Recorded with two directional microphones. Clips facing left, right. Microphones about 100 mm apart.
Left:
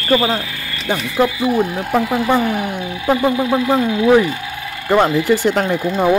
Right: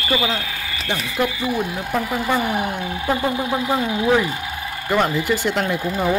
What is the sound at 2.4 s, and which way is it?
Speech, 25° right (ahead or behind).